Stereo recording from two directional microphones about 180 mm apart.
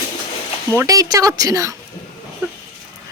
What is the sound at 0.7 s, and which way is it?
Speech, 15° right (ahead or behind).